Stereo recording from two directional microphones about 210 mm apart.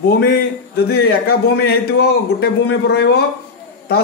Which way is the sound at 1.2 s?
50° left (ahead or behind).